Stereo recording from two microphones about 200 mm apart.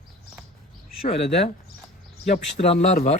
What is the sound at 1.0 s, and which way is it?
Speech, 30° left (ahead or behind).